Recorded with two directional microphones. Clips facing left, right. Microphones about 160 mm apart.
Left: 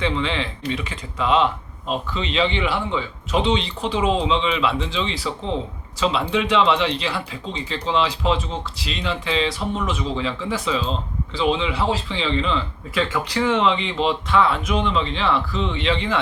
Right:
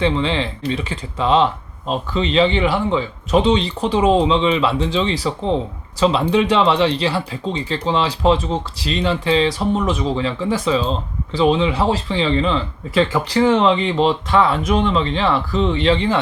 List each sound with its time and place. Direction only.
0.0 s speech: 35° right (ahead or behind)